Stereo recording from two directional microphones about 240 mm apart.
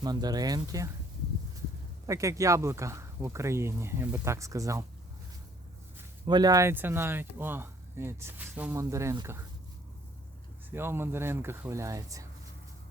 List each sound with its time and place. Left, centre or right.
0.0 s speech: centre
2.0 s speech: centre
6.0 s speech: centre
10.7 s speech: centre